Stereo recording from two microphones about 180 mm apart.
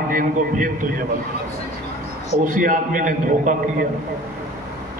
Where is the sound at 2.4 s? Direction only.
50° right (ahead or behind).